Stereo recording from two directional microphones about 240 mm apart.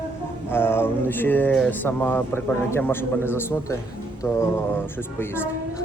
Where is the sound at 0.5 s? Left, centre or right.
Centre.